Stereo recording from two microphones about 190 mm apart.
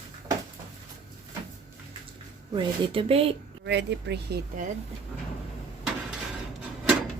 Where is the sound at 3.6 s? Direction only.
65° right (ahead or behind).